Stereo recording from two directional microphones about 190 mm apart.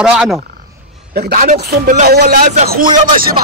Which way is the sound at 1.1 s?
55° right (ahead or behind).